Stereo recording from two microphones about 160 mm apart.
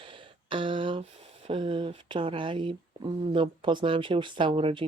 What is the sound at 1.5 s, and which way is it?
Speech, 30° right (ahead or behind).